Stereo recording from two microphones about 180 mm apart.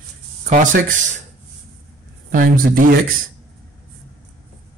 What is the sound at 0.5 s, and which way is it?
Speech, 45° right (ahead or behind).